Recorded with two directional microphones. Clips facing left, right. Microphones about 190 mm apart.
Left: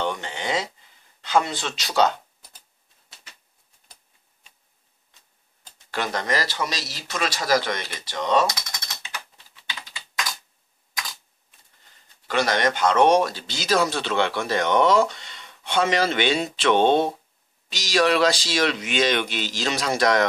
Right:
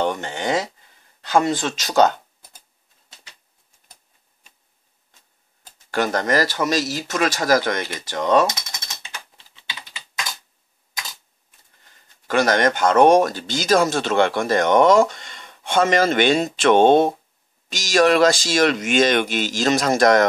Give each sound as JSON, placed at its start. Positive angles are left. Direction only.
{"t": 0.0, "sound": "a sound", "side_deg": -45}
{"t": 1.3, "sound": "speech", "side_deg": -45}
{"t": 5.9, "sound": "speech", "side_deg": -45}
{"t": 8.5, "sound": "speech", "side_deg": -25}
{"t": 9.6, "sound": "typing", "side_deg": -20}
{"t": 12.3, "sound": "speech", "side_deg": -45}